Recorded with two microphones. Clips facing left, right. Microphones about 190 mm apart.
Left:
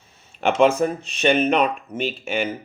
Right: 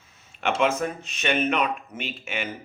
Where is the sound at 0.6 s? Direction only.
35° left (ahead or behind).